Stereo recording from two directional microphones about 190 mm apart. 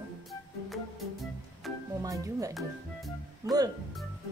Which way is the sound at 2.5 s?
Centre (ahead or behind).